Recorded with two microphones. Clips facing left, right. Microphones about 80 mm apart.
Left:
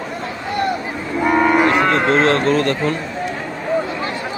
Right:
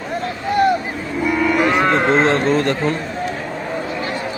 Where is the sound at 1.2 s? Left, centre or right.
Left.